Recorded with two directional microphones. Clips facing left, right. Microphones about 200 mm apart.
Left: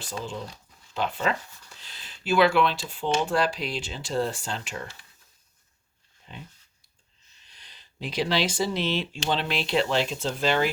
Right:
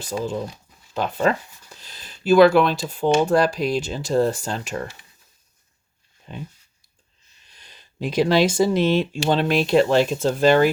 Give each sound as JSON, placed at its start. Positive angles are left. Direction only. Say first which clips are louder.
{"t": 0.0, "sound": "speech", "louder": "right 8 dB", "side_deg": -45}
{"t": 6.3, "sound": "speech", "louder": "right 8 dB", "side_deg": -45}
{"t": 7.5, "sound": "speech", "louder": "right 5 dB", "side_deg": -45}